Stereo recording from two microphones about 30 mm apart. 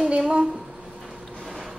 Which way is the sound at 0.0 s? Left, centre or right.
Right.